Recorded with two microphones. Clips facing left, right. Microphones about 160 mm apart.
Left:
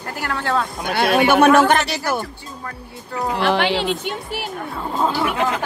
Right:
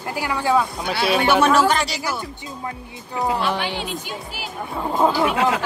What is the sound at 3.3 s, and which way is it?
Speech, 75° left (ahead or behind).